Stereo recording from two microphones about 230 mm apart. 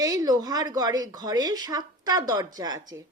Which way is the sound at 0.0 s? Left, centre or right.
Centre.